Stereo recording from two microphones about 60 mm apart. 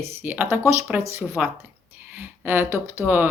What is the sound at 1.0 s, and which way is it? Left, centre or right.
Speech, right.